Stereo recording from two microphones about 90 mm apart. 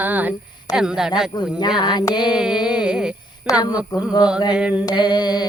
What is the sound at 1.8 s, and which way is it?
Mantra, 55° left (ahead or behind).